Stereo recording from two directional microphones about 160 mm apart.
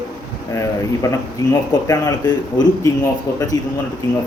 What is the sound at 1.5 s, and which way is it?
Speech, 25° left (ahead or behind).